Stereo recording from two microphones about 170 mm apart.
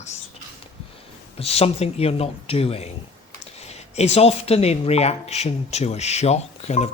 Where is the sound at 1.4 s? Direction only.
35° left (ahead or behind).